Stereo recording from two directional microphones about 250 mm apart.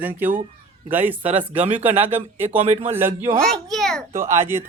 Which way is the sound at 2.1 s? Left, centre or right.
Centre.